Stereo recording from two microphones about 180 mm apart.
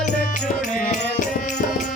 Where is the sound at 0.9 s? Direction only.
45° left (ahead or behind).